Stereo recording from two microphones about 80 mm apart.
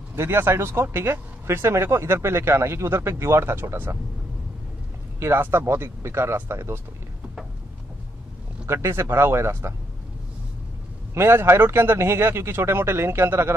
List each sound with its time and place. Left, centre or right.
0.1 s speech: right
5.2 s speech: right
8.6 s speech: right
11.1 s speech: right